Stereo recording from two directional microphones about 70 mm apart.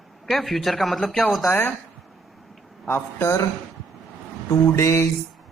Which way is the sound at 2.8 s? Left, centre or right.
Left.